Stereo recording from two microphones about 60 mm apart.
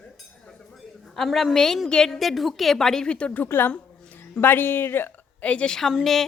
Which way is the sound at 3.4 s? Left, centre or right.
Left.